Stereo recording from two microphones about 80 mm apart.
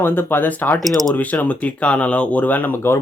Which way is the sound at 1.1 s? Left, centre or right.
Centre.